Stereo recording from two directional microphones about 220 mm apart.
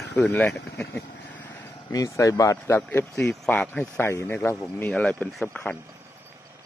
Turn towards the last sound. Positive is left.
turn(degrees=10)  # may be behind; listen again after turning